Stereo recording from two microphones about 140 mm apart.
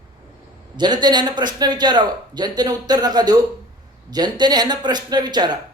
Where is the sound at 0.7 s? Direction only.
30° right (ahead or behind).